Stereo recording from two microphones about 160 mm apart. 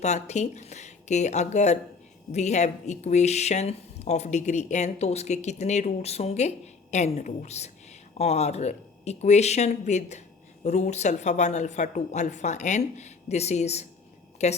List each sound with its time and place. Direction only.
0.0 s speech: 45° left (ahead or behind)